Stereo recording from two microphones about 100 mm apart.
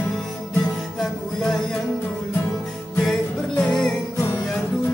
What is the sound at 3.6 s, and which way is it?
Music, 10° left (ahead or behind).